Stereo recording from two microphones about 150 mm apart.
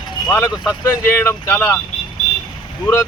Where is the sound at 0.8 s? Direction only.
20° left (ahead or behind).